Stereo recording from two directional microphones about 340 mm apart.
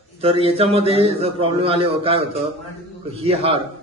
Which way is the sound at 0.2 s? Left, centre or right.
Centre.